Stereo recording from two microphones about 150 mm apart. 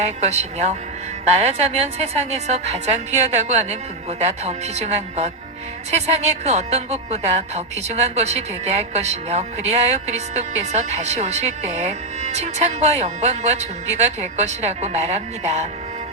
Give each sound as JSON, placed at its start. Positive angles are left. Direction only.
{"t": 0.0, "sound": "a woman's voice", "side_deg": -50}